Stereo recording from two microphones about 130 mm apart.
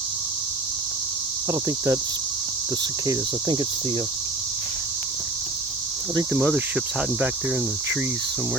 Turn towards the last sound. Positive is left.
turn(degrees=-15)  # may be behind; listen again after turning